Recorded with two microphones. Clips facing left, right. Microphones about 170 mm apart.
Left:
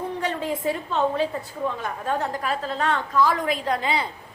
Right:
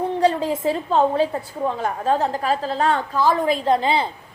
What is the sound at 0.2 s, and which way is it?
A woman's voice, 35° right (ahead or behind).